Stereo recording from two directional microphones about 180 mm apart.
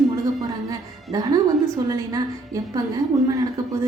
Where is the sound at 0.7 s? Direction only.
20° right (ahead or behind).